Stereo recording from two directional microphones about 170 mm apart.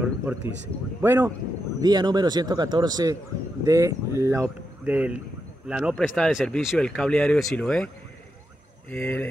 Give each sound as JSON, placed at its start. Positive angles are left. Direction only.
{"t": 0.0, "sound": "a sound", "side_deg": -10}
{"t": 1.0, "sound": "speech", "side_deg": -15}
{"t": 1.8, "sound": "a man's voice", "side_deg": -25}
{"t": 8.9, "sound": "speech", "side_deg": 10}